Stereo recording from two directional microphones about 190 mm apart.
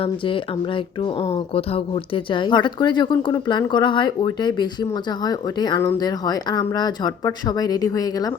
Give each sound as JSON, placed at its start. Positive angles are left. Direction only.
{"t": 0.0, "sound": "speech", "side_deg": 25}